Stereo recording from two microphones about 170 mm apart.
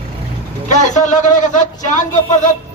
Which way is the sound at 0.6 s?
45° left (ahead or behind).